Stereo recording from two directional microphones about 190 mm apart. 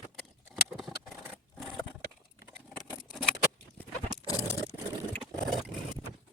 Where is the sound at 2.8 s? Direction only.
Centre (ahead or behind).